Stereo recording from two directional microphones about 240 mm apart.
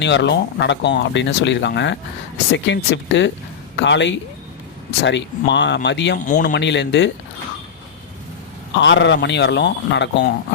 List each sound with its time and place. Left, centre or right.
0.0 s speech: left
6.1 s a man's voice: left
6.5 s speech: left
8.8 s speech: left